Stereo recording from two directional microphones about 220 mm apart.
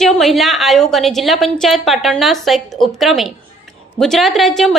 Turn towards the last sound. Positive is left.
turn(degrees=0)  # may be behind; listen again after turning